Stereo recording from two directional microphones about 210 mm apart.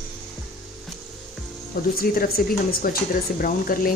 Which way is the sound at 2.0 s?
45° left (ahead or behind).